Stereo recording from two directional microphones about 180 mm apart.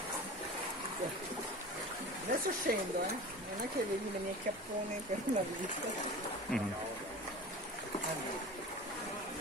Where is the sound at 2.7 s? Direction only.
55° right (ahead or behind).